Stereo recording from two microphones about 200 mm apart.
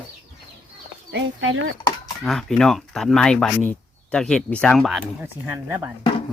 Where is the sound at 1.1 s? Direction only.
85° right.